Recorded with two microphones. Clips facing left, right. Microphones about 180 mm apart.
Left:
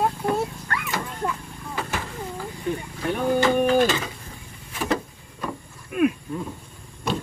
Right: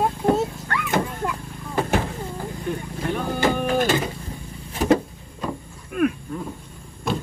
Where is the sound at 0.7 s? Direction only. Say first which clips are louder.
Right 6 dB; 55° right (ahead or behind).